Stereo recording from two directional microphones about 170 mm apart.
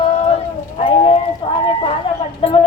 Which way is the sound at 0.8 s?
30° left (ahead or behind).